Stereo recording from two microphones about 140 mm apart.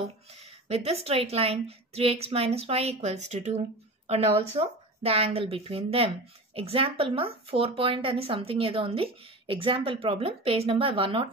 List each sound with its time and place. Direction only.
0.7 s speech: 45° right (ahead or behind)